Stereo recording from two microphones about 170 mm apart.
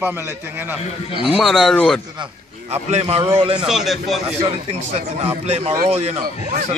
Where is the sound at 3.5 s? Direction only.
5° right (ahead or behind).